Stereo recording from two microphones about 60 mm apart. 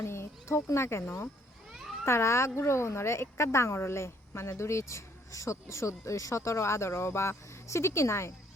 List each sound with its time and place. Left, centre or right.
0.0 s a child's voice: left
1.7 s cat: centre
2.0 s a woman's voice: left